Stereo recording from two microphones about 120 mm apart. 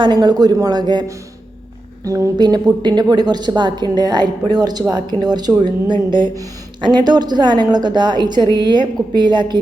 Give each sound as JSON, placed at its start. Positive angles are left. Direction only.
{"t": 0.0, "sound": "a woman's voice", "side_deg": -40}
{"t": 2.0, "sound": "a woman's voice", "side_deg": -25}